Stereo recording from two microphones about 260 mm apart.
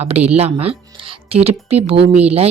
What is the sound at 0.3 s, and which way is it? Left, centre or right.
Speech, right.